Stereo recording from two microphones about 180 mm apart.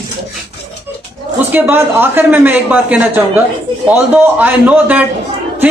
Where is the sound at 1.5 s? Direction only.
10° right (ahead or behind).